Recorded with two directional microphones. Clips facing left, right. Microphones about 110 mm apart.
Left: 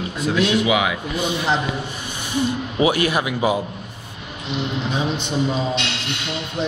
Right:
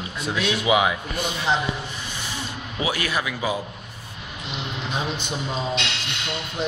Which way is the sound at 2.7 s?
20° left (ahead or behind).